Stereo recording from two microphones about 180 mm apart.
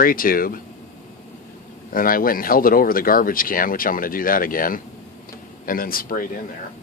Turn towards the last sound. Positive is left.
turn(degrees=50)  # may be behind; listen again after turning